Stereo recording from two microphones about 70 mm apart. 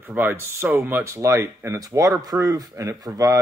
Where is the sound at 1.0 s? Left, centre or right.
Right.